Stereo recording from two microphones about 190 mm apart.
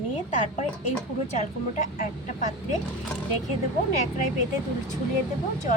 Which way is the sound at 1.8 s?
40° left (ahead or behind).